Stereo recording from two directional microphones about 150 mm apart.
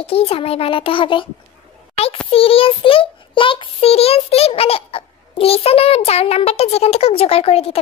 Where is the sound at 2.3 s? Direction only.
40° left (ahead or behind).